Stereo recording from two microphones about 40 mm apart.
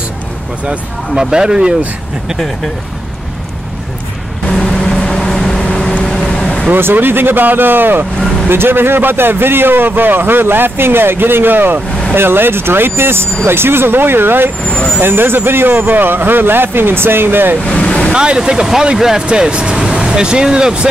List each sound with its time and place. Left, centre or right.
1.3 s speech: centre
2.3 s speech: centre
4.6 s vehicle: centre
5.8 s vehicle: left
6.0 s vehicle: centre
6.7 s a man's voice: right
14.7 s speech: centre
15.0 s a man's voice: right
17.6 s speech: left
18.1 s speech: right
19.2 s speech: right